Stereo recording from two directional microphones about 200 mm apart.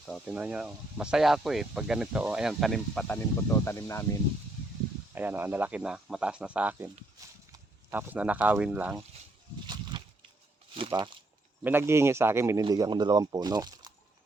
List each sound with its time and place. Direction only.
0.3 s speech: 5° right (ahead or behind)
3.5 s speech: 15° left (ahead or behind)
5.1 s a man's voice: 10° right (ahead or behind)
10.0 s a sound: 25° right (ahead or behind)
10.8 s speech: 25° right (ahead or behind)
11.6 s a man's voice: 10° right (ahead or behind)